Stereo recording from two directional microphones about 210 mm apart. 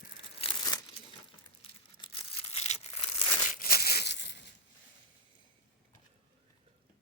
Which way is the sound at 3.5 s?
45° left (ahead or behind).